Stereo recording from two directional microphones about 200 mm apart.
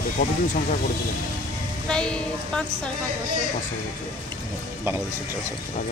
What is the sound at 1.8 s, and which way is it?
Speech, 5° left (ahead or behind).